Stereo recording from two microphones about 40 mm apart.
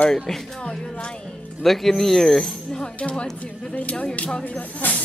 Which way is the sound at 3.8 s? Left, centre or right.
Left.